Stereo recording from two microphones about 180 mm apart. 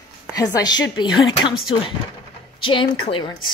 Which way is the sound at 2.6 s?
30° left (ahead or behind).